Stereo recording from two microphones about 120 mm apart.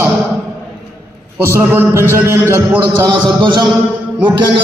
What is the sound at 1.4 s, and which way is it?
A man's voice, 15° right (ahead or behind).